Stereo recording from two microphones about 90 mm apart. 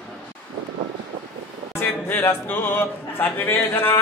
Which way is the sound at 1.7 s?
25° left (ahead or behind).